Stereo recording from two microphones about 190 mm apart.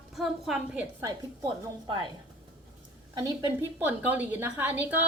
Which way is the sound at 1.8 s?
25° right (ahead or behind).